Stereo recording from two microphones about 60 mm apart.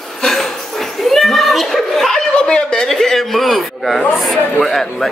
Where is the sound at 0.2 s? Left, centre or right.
Centre.